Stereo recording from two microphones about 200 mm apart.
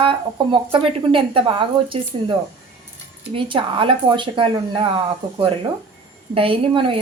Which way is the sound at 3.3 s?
25° right (ahead or behind).